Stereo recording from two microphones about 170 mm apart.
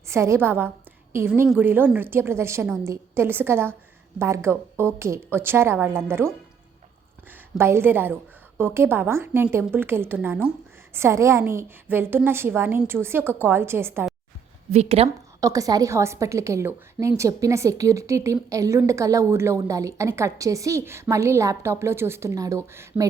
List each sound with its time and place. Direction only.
0.1 s a woman's voice: 15° right (ahead or behind)
14.7 s speech: 40° right (ahead or behind)
15.4 s a woman's voice: 20° right (ahead or behind)